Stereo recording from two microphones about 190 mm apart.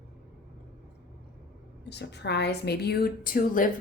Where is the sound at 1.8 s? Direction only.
65° left (ahead or behind); by 3.7 s 45° left (ahead or behind).